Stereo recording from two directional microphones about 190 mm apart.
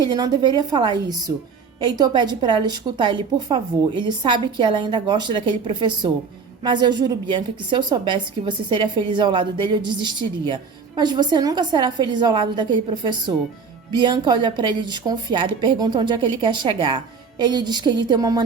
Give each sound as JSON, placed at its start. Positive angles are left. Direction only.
{"t": 0.0, "sound": "a woman's voice", "side_deg": -20}